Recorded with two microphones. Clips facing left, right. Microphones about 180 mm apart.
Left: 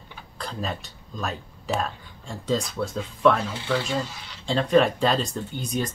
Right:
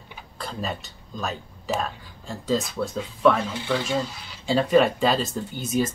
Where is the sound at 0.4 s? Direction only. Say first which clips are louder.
Even; centre (ahead or behind).